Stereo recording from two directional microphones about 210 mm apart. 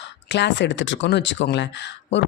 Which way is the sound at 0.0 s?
55° left (ahead or behind).